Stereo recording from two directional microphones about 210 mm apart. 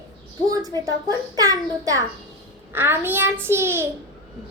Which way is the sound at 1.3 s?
15° right (ahead or behind).